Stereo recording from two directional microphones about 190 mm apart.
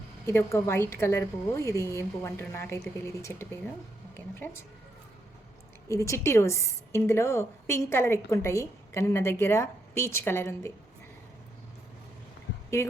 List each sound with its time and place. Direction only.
0.3 s a woman's voice: 15° left (ahead or behind)
5.9 s a woman's voice: 15° left (ahead or behind)
12.8 s a woman's voice: 15° left (ahead or behind)